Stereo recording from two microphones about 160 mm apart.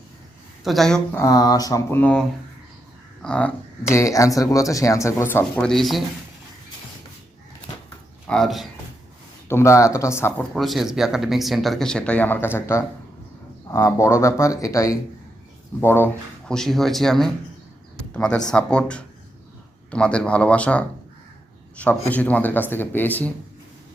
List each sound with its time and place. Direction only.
0.6 s speech: centre (ahead or behind)
1.2 s speech: 20° left (ahead or behind)
3.2 s speech: 5° left (ahead or behind)
3.9 s speech: 20° left (ahead or behind); by 6.0 s centre (ahead or behind)
8.3 s speech: centre (ahead or behind)
9.5 s speech: 15° left (ahead or behind)
10.5 s speech: centre (ahead or behind)
16.5 s speech: centre (ahead or behind)